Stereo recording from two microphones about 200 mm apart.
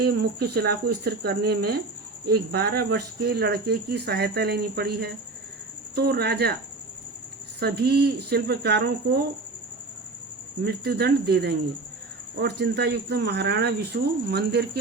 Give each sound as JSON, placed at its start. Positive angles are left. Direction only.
{"t": 0.0, "sound": "speech", "side_deg": -50}
{"t": 7.6, "sound": "speech", "side_deg": -55}
{"t": 10.6, "sound": "speech", "side_deg": -55}